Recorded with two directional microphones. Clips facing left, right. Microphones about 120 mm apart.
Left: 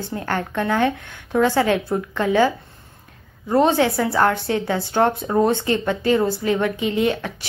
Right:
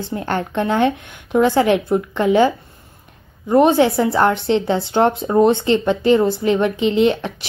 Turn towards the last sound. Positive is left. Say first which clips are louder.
# right 5 dB
turn(degrees=-20)  # may be behind; listen again after turning